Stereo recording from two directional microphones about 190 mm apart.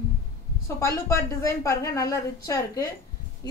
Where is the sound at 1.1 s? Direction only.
15° left (ahead or behind).